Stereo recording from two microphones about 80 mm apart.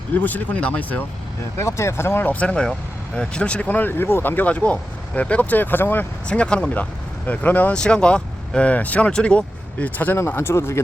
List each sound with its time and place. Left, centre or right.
0.1 s speech: left
1.5 s speech: left
6.2 s speech: centre; by 10.8 s left